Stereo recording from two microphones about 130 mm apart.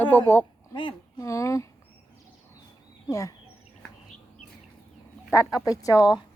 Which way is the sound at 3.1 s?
25° left (ahead or behind).